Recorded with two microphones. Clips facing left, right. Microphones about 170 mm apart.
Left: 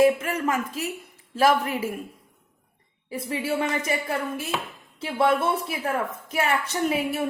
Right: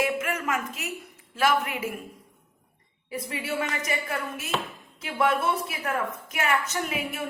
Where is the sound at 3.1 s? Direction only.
30° left (ahead or behind).